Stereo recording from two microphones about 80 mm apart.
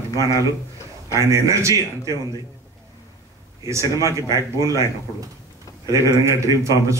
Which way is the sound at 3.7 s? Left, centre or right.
Right.